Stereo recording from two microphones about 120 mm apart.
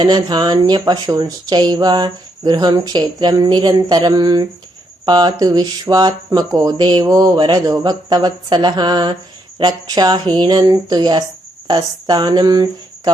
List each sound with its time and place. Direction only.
0.0 s speech: 35° right (ahead or behind)